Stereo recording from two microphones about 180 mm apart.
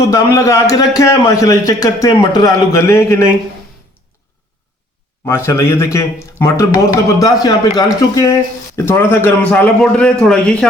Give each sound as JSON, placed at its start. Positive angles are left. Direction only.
{"t": 0.1, "sound": "a man's voice", "side_deg": 15}
{"t": 5.2, "sound": "a man's voice", "side_deg": 15}